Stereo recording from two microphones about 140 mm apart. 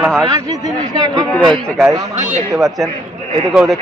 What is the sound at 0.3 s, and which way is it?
Speech, 25° right (ahead or behind).